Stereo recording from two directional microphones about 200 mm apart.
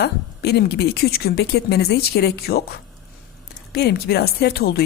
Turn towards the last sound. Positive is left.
turn(degrees=50)  # may be behind; listen again after turning